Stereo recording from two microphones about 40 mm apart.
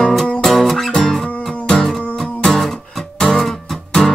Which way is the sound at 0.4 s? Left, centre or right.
Centre.